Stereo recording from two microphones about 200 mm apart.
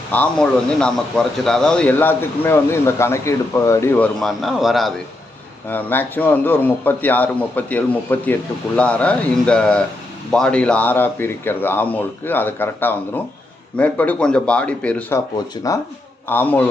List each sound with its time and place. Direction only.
0.1 s a man's voice: 5° left (ahead or behind)
15.6 s speech: 20° left (ahead or behind)
16.3 s a man's voice: 10° left (ahead or behind)